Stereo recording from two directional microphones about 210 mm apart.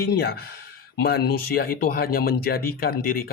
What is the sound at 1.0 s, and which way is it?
Speech, 50° left (ahead or behind).